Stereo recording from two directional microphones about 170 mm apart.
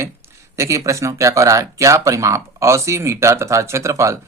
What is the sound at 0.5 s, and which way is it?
Speech, 15° right (ahead or behind).